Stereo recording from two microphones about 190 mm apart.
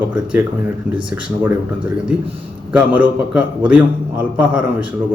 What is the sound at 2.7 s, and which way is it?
A man's voice, 5° right (ahead or behind).